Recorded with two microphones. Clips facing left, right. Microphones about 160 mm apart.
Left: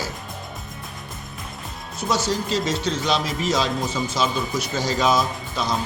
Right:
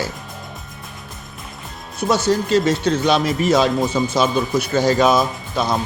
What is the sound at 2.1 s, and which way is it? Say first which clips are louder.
Speech: right 7 dB; 60° right (ahead or behind).